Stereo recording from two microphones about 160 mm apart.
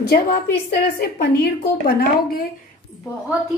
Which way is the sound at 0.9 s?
75° left (ahead or behind).